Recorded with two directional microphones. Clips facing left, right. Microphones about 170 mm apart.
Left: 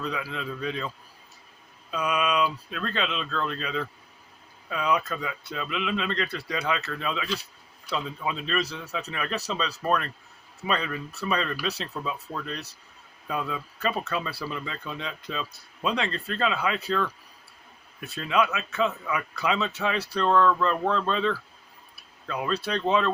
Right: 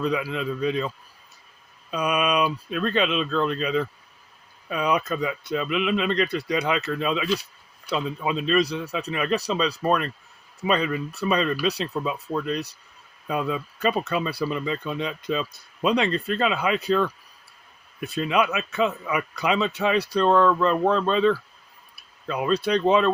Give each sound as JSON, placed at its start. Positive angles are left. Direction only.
{"t": 0.0, "sound": "speech", "side_deg": -15}
{"t": 1.9, "sound": "speech", "side_deg": -20}